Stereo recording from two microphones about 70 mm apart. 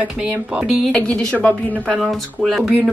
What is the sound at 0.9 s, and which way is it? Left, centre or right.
Speech, centre.